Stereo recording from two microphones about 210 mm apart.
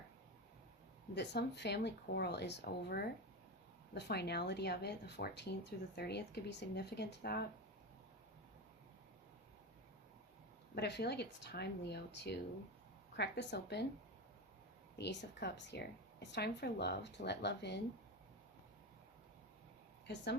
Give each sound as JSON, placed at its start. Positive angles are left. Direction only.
{"t": 1.1, "sound": "a woman's voice", "side_deg": 55}
{"t": 10.8, "sound": "a woman's voice", "side_deg": 50}
{"t": 14.9, "sound": "a woman's voice", "side_deg": 55}